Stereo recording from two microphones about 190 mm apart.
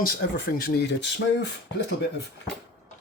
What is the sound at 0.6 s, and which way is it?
Speech, 60° left (ahead or behind).